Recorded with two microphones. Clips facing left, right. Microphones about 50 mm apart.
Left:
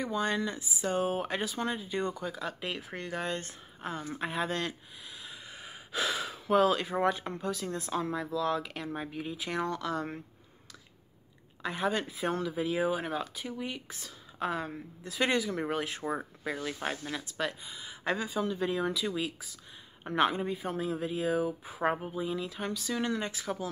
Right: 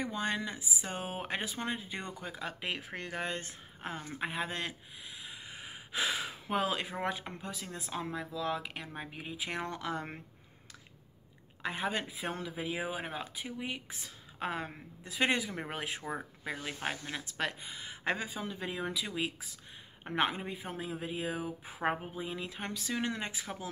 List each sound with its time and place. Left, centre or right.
0.0 s speech: right
4.2 s speech: centre
5.2 s gasp: right
6.9 s speech: centre
9.1 s speech: right
11.6 s speech: right
17.2 s speech: right
18.4 s speech: centre
19.1 s speech: right
20.1 s speech: centre